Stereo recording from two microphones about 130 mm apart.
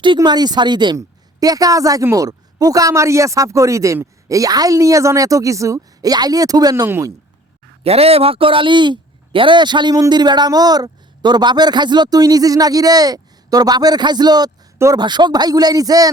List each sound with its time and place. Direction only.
0.0 s a woman's voice: 35° right (ahead or behind)
6.8 s speech: 20° right (ahead or behind)
7.9 s speech: 50° right (ahead or behind); by 16.0 s 30° right (ahead or behind)